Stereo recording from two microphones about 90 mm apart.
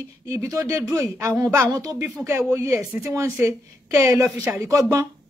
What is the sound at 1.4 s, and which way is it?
Speech, 35° right (ahead or behind).